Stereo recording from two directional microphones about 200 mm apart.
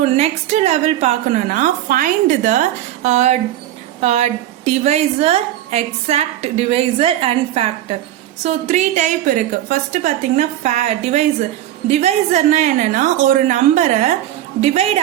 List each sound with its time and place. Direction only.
0.2 s a woman's voice: 30° right (ahead or behind)